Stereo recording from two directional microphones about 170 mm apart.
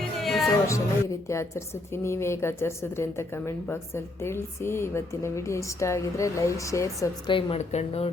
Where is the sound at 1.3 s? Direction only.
15° left (ahead or behind).